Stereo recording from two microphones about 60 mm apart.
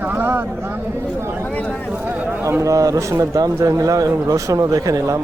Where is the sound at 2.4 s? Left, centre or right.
Right.